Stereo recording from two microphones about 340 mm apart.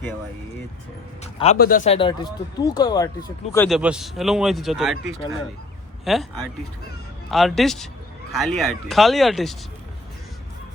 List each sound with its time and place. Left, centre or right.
1.2 s speech: centre
6.1 s speech: centre